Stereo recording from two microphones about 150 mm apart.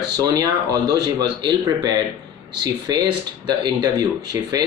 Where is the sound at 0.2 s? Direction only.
25° right (ahead or behind).